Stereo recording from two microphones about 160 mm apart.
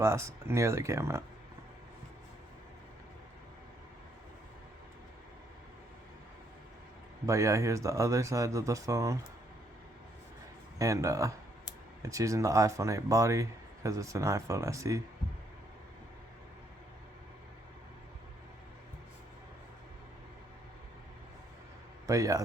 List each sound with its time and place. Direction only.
0.0 s speech: 15° right (ahead or behind)
7.3 s speech: 20° right (ahead or behind)
10.8 s speech: 20° right (ahead or behind)
22.0 s a man's voice: 20° right (ahead or behind)